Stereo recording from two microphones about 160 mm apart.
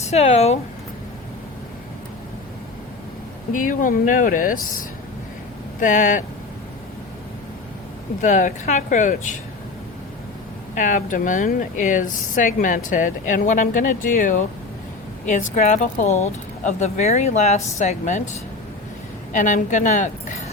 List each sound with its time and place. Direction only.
0.0 s speech: 45° left (ahead or behind)
3.5 s speech: 55° left (ahead or behind)
5.8 s a woman's voice: 55° left (ahead or behind)
8.2 s a woman's voice: 50° left (ahead or behind)
10.8 s a woman's voice: 55° left (ahead or behind)